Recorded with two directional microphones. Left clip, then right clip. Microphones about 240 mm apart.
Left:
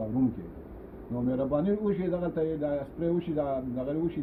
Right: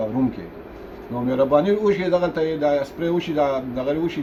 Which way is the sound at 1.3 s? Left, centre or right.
Right.